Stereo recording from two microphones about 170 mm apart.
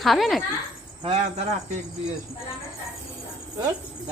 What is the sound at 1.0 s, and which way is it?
Speech, 40° right (ahead or behind).